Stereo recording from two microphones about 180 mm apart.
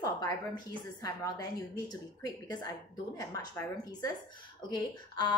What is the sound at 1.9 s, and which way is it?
A woman's voice, 20° left (ahead or behind).